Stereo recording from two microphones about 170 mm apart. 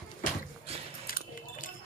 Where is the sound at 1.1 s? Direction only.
55° left (ahead or behind).